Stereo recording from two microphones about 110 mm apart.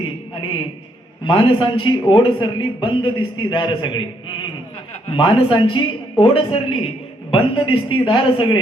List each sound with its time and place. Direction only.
1.2 s speech: 50° left (ahead or behind)
5.1 s speech: 50° left (ahead or behind)
6.1 s speech: 60° left (ahead or behind)